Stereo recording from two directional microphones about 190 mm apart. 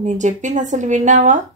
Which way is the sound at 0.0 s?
40° right (ahead or behind).